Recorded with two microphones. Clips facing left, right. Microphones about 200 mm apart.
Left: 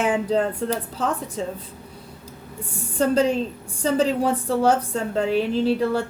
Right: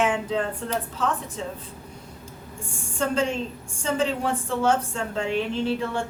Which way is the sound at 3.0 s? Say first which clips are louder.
Left 5 dB; 35° left (ahead or behind).